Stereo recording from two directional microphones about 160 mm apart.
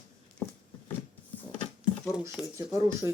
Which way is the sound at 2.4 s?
5° right (ahead or behind).